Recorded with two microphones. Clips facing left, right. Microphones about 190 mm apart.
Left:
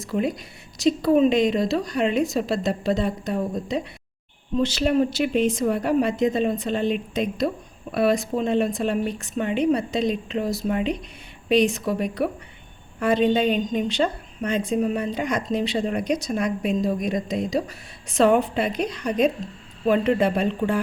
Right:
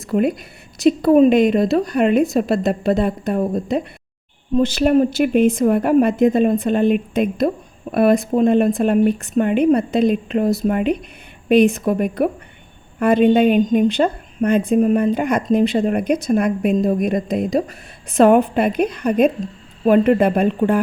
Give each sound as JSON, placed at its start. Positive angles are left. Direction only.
{"t": 0.0, "sound": "a woman's voice", "side_deg": -60}